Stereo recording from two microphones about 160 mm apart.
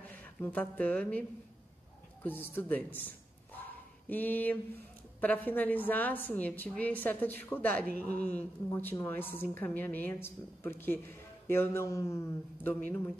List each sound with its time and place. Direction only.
0.1 s speech: 10° left (ahead or behind)
2.2 s a woman's voice: 10° left (ahead or behind)
4.1 s a woman's voice: 10° left (ahead or behind)